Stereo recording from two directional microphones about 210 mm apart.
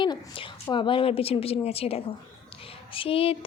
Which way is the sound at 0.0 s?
20° left (ahead or behind).